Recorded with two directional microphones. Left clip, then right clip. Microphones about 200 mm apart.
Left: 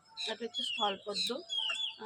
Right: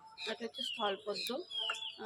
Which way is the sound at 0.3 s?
Centre (ahead or behind).